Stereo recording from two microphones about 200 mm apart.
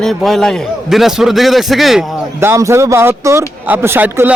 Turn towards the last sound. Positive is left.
turn(degrees=-10)  # may be behind; listen again after turning